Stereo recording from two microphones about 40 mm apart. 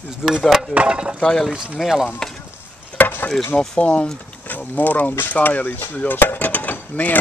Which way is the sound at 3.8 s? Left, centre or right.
Left.